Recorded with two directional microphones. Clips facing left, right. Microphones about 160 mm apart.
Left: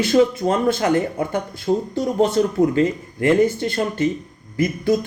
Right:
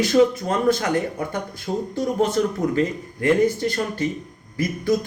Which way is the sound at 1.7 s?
45° left (ahead or behind).